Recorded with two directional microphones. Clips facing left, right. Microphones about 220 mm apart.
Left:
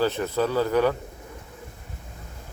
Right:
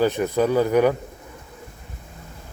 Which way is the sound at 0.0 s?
15° right (ahead or behind).